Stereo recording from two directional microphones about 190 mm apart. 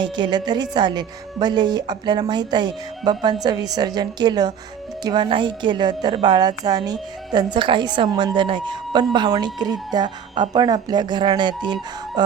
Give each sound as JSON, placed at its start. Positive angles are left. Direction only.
{"t": 0.0, "sound": "speech", "side_deg": -25}